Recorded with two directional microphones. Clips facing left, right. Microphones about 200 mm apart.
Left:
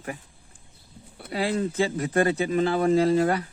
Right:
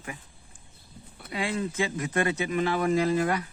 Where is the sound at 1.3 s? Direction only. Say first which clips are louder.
Left 4 dB; 40° left (ahead or behind).